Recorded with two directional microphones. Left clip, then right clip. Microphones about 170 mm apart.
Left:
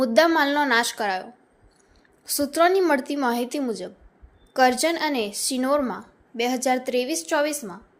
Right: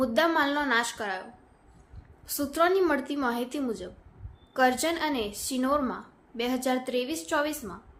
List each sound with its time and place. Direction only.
0.0 s a woman's voice: 25° left (ahead or behind)